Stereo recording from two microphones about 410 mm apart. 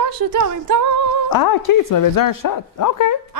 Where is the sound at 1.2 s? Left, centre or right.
Left.